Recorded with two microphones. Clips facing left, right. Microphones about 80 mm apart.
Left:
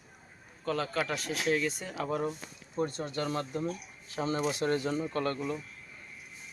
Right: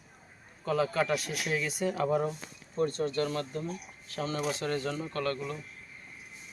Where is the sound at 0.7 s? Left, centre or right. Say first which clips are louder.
Right 4 dB; centre.